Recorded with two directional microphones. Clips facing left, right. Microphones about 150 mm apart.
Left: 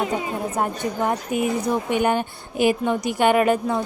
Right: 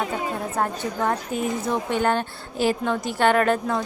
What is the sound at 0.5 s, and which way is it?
Speech, 15° left (ahead or behind).